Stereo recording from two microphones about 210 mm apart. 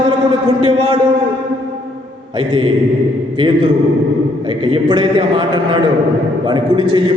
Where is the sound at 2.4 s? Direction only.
25° right (ahead or behind).